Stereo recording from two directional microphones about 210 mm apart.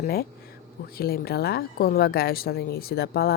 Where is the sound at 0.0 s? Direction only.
45° left (ahead or behind).